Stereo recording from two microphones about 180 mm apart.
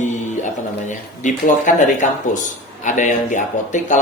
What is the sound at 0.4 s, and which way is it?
Speech, 45° left (ahead or behind).